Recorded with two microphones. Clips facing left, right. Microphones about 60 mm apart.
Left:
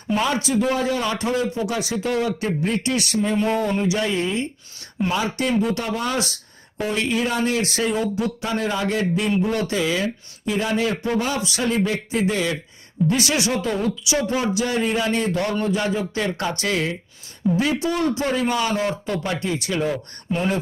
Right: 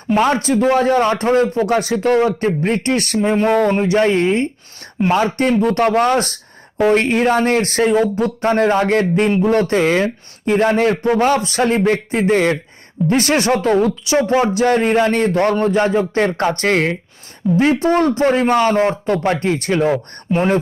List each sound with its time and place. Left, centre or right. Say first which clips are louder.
0.1 s speech: right 6 dB; right
3.3 s speech: right 8 dB; right
3.7 s a man's voice: right 7 dB; right